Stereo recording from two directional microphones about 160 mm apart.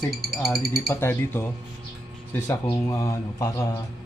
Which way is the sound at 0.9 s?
15° left (ahead or behind).